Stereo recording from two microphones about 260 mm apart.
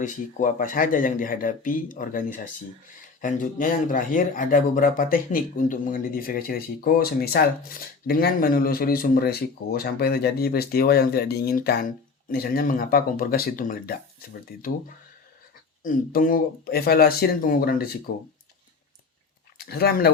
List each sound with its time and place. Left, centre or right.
0.0 s speech: left
15.8 s speech: left
19.5 s speech: left